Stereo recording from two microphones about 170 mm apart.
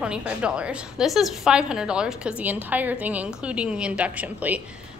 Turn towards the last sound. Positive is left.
turn(degrees=-10)  # may be behind; listen again after turning